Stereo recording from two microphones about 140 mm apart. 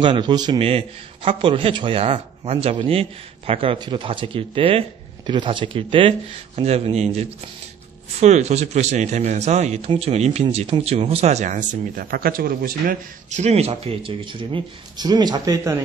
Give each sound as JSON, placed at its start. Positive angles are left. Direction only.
{"t": 0.0, "sound": "speech", "side_deg": -35}
{"t": 0.7, "sound": "speech", "side_deg": -45}
{"t": 13.4, "sound": "speech", "side_deg": -50}